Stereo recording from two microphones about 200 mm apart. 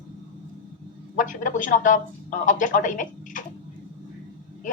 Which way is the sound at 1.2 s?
40° left (ahead or behind).